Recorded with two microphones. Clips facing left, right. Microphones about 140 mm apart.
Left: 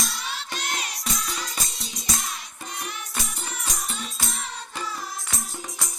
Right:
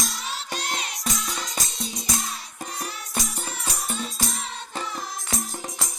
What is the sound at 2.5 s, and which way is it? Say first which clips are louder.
Music: right 1 dB; 35° right (ahead or behind).